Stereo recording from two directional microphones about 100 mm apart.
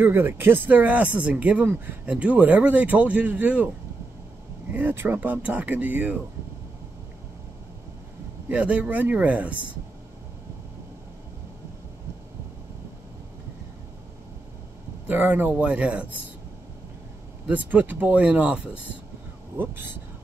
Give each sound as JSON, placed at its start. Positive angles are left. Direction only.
{"t": 0.0, "sound": "speech", "side_deg": -20}
{"t": 4.7, "sound": "speech", "side_deg": -20}
{"t": 8.5, "sound": "speech", "side_deg": -15}
{"t": 15.0, "sound": "speech", "side_deg": -20}
{"t": 17.5, "sound": "speech", "side_deg": -15}